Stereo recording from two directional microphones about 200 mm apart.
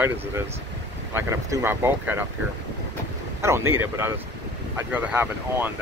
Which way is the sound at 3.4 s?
15° right (ahead or behind).